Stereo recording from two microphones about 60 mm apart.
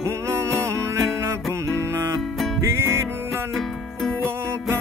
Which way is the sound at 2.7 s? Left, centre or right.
Right.